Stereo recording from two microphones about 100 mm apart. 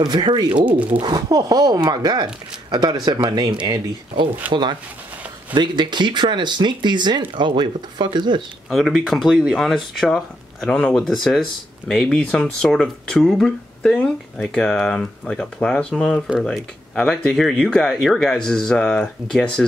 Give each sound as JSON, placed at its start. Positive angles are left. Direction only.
{"t": 0.0, "sound": "speech", "side_deg": -50}
{"t": 0.6, "sound": "speech", "side_deg": -15}
{"t": 0.8, "sound": "speech", "side_deg": -50}
{"t": 8.6, "sound": "speech", "side_deg": 0}